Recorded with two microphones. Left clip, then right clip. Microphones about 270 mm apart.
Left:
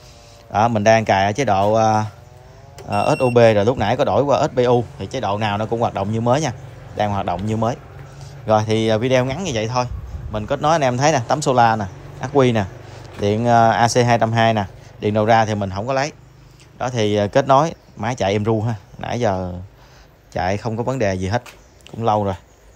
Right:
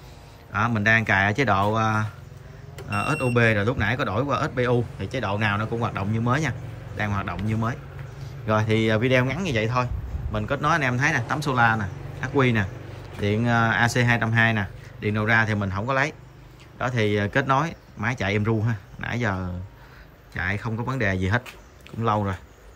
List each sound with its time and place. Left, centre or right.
0.5 s speech: centre